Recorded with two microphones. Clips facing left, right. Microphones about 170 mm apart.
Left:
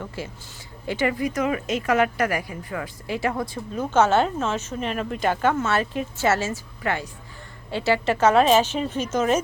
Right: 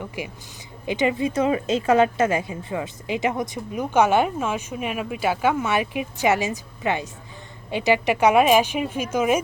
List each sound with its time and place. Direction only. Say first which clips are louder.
0.2 s a woman's voice: right 1 dB; 15° right (ahead or behind)